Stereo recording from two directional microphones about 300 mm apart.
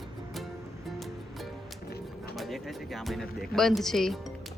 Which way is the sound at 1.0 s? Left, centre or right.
Centre.